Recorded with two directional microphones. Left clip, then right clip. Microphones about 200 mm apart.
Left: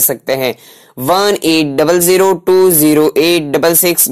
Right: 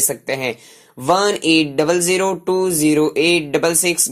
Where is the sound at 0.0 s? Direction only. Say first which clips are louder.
Left 6 dB; 35° left (ahead or behind).